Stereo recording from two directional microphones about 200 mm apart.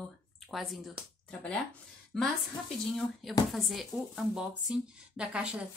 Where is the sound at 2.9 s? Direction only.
Centre (ahead or behind).